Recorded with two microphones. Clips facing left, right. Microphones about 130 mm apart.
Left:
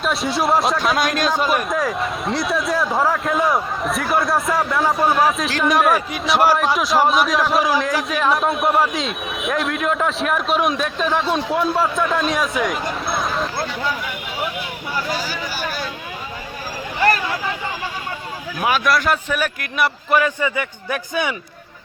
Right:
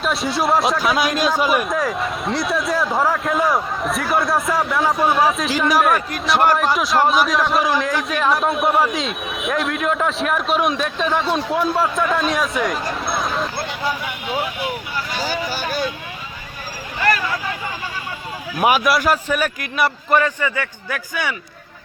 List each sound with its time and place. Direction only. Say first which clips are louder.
0.0 s speech: even; centre (ahead or behind)
13.1 s a sound: even; centre (ahead or behind)
18.6 s speech: right 2 dB; 10° right (ahead or behind)
20.4 s a man's voice: left 1 dB; 20° left (ahead or behind)